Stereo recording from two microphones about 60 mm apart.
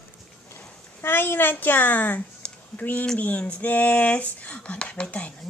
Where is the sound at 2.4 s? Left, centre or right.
Left.